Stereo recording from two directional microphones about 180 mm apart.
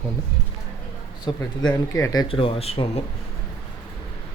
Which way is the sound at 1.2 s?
20° left (ahead or behind).